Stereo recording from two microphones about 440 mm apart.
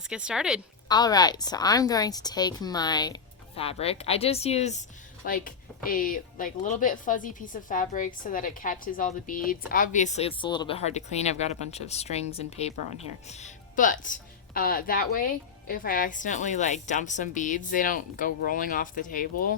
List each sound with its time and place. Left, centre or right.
0.1 s a woman's voice: centre
0.9 s speech: centre